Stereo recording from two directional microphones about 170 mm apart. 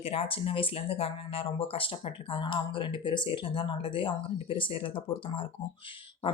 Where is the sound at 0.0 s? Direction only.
35° left (ahead or behind).